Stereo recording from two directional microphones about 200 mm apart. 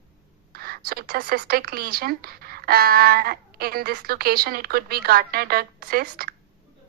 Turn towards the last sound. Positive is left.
turn(degrees=-50)  # may be behind; listen again after turning